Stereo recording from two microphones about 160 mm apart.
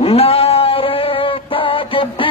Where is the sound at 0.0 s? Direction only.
40° left (ahead or behind).